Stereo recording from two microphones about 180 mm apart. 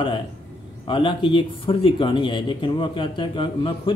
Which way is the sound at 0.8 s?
25° left (ahead or behind).